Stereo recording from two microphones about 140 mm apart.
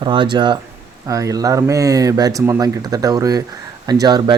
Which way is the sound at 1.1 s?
25° right (ahead or behind).